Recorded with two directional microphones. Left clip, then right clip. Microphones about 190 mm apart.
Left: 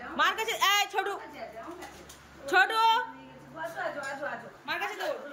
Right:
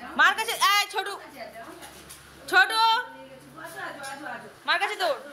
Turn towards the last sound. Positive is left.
turn(degrees=0)  # may be behind; listen again after turning